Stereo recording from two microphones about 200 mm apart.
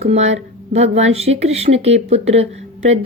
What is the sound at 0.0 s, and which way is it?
A woman's voice, 35° right (ahead or behind).